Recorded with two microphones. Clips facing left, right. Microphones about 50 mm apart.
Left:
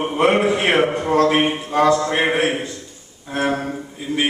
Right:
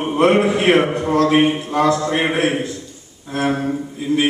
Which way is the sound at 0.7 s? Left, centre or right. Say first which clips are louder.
Right 2 dB; centre.